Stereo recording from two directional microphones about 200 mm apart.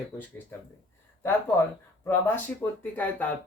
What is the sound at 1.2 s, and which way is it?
Speech, 10° left (ahead or behind).